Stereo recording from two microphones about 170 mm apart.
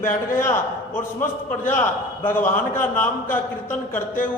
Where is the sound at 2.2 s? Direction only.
10° left (ahead or behind).